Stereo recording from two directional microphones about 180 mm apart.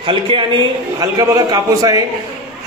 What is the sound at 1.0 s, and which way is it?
A man's voice, 20° right (ahead or behind).